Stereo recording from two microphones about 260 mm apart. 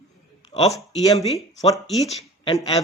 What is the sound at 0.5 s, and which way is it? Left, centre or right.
Speech, left.